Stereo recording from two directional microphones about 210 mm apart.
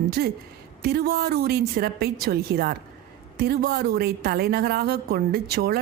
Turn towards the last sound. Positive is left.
turn(degrees=-50)  # may be behind; listen again after turning